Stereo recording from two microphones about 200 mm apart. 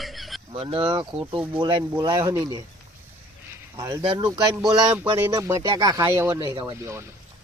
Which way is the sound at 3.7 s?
15° right (ahead or behind).